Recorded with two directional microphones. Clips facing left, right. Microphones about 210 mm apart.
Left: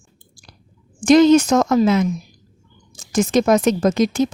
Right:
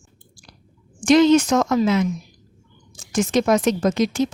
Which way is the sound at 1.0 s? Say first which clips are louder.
Left 3 dB; 45° left (ahead or behind).